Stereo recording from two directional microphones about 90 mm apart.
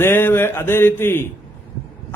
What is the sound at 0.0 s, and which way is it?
A man's voice, 25° left (ahead or behind).